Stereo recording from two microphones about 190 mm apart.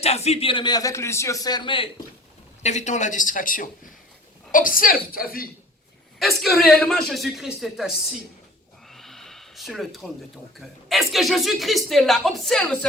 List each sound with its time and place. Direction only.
0.0 s a man's voice: 35° left (ahead or behind)
2.6 s speech: 40° left (ahead or behind)
6.1 s a woman's voice: centre (ahead or behind)
8.9 s snort: centre (ahead or behind)
10.6 s a woman's voice: centre (ahead or behind)